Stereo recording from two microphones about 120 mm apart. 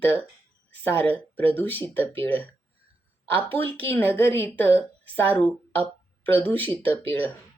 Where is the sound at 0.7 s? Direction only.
15° left (ahead or behind).